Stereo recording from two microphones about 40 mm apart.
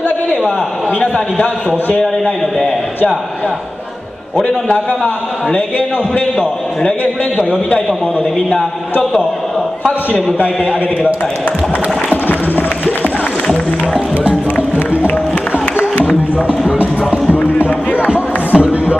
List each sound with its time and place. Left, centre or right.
0.9 s a man's voice: left
2.0 s a man's voice: left
4.6 s a man's voice: left
12.3 s music: left
16.0 s a sound: left
17.5 s music: left
17.9 s music: right